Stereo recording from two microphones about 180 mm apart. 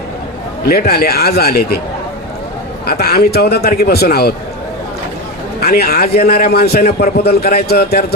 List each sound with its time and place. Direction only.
0.6 s a man's voice: 60° left (ahead or behind)
2.8 s a man's voice: 60° left (ahead or behind)
5.5 s a man's voice: 60° left (ahead or behind)